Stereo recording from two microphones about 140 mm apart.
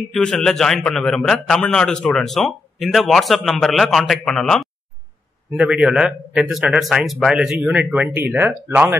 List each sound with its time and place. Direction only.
0.1 s a man's voice: 5° left (ahead or behind)
5.6 s speech: 5° right (ahead or behind)